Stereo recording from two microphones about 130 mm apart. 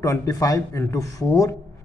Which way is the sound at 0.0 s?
25° left (ahead or behind).